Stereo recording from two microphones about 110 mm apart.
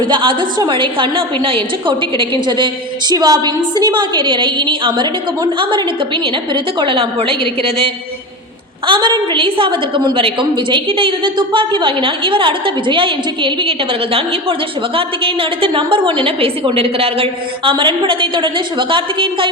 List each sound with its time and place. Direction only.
0.0 s a woman's voice: 50° right (ahead or behind)
3.1 s a woman's voice: 35° right (ahead or behind); by 7.3 s 55° right (ahead or behind)
8.9 s a woman's voice: 45° right (ahead or behind)